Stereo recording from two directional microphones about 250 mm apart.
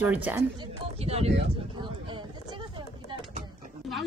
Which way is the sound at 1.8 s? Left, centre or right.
Centre.